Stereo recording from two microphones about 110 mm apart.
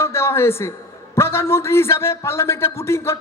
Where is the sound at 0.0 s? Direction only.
25° left (ahead or behind).